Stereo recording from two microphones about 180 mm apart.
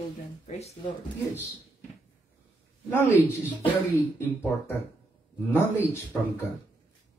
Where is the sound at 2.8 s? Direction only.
10° left (ahead or behind).